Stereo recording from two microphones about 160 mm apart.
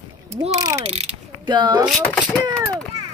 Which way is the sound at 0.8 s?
40° right (ahead or behind).